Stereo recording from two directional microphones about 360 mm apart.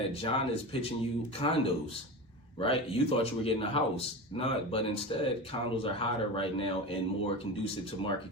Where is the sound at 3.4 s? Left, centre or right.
Centre.